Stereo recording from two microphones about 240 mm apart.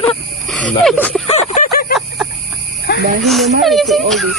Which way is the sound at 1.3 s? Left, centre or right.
Left.